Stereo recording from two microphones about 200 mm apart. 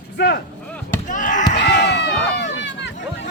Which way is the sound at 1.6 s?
55° left (ahead or behind).